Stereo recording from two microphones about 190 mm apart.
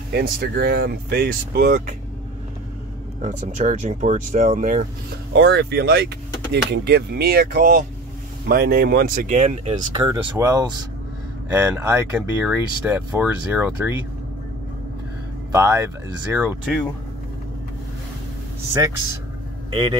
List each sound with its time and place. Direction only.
0.1 s speech: 55° right (ahead or behind)
3.2 s speech: 40° right (ahead or behind)
5.3 s speech: 60° right (ahead or behind); by 9.8 s 35° right (ahead or behind)
9.9 s speech: 20° right (ahead or behind)
15.5 s speech: 15° right (ahead or behind)
18.7 s speech: 15° right (ahead or behind)